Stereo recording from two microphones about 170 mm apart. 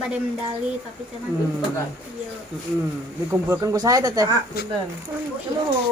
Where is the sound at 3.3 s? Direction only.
15° right (ahead or behind).